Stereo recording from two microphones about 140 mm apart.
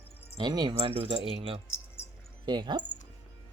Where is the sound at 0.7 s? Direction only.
40° right (ahead or behind).